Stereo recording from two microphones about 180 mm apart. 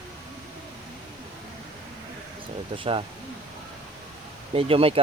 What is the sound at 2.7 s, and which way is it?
Speech, 30° right (ahead or behind).